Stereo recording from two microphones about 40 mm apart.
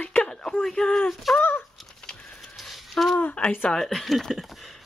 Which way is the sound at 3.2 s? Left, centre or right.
Left.